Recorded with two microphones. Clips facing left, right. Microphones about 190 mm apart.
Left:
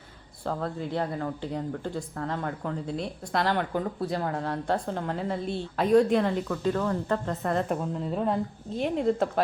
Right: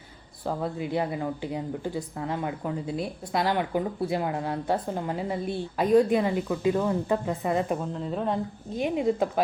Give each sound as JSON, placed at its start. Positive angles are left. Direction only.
{"t": 0.4, "sound": "a woman's voice", "side_deg": -10}